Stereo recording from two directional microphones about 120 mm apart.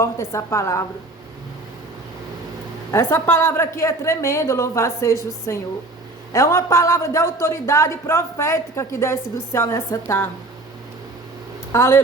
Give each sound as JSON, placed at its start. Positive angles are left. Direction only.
{"t": 0.0, "sound": "speech", "side_deg": 25}
{"t": 2.9, "sound": "speech", "side_deg": 20}
{"t": 11.7, "sound": "speech", "side_deg": 20}